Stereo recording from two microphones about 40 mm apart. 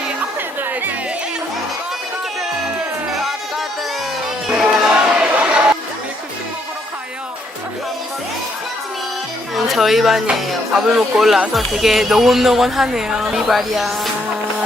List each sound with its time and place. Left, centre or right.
4.7 s crowd: centre
5.2 s chatter: right
9.6 s speech: centre